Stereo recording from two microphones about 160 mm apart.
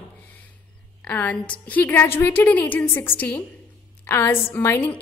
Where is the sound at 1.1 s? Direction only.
10° left (ahead or behind).